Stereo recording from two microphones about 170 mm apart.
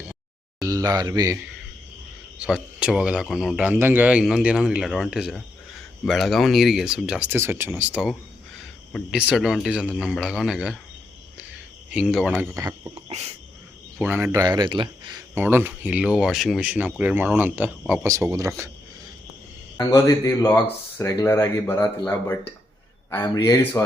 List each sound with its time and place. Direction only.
0.6 s speech: 20° right (ahead or behind)
2.4 s speech: 5° right (ahead or behind)
8.5 s a sound: 5° left (ahead or behind)
9.1 s speech: 5° right (ahead or behind)
11.9 s speech: 5° right (ahead or behind)
12.9 s a sound: 40° right (ahead or behind)
14.0 s speech: 10° right (ahead or behind)
14.4 s speech: 25° right (ahead or behind)
15.4 s speech: 10° right (ahead or behind)
19.8 s speech: 20° left (ahead or behind)